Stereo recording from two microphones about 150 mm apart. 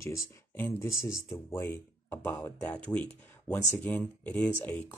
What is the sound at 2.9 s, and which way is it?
Speech, 10° left (ahead or behind).